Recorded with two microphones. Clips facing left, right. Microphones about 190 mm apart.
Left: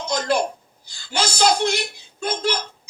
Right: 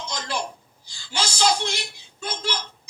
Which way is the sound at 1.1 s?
60° left (ahead or behind).